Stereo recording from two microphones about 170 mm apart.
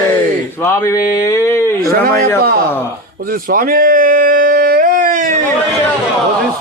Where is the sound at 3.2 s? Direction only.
60° right (ahead or behind).